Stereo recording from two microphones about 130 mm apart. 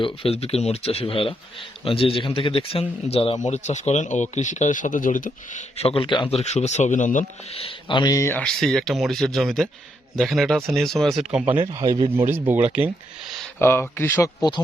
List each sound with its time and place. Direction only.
0.0 s speech: 50° left (ahead or behind)
3.3 s speech: 60° left (ahead or behind); by 5.6 s 85° left
5.7 s speech: 50° left (ahead or behind)
6.3 s speech: 55° left (ahead or behind); by 7.3 s 85° left
7.5 s speech: 45° left (ahead or behind); by 8.3 s 30° left (ahead or behind)
8.3 s speech: 5° left (ahead or behind)
11.7 s speech: 25° right (ahead or behind)
13.6 s speech: 20° left (ahead or behind)